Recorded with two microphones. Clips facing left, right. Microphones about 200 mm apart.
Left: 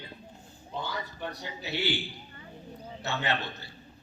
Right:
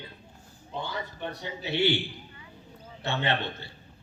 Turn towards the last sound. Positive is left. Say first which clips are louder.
# right 3 dB
turn(degrees=-25)  # may be behind; listen again after turning